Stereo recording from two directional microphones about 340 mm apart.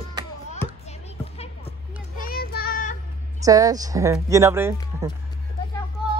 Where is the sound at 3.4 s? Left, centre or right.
Centre.